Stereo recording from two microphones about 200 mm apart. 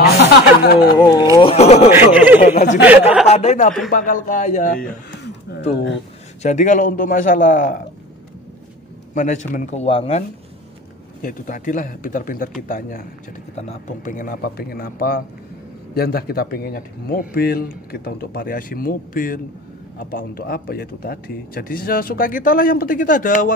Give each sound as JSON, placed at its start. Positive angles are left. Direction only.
{"t": 0.0, "sound": "a sound", "side_deg": 55}
{"t": 0.9, "sound": "speech", "side_deg": 20}
{"t": 1.3, "sound": "a sound", "side_deg": 25}
{"t": 1.9, "sound": "speech", "side_deg": -10}
{"t": 2.4, "sound": "speech", "side_deg": 35}
{"t": 2.8, "sound": "a sound", "side_deg": -10}
{"t": 3.3, "sound": "speech", "side_deg": 35}
{"t": 6.4, "sound": "speech", "side_deg": 35}
{"t": 9.1, "sound": "speech", "side_deg": 40}
{"t": 11.2, "sound": "speech", "side_deg": 40}